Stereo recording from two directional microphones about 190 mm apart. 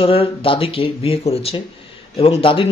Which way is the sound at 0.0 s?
30° left (ahead or behind).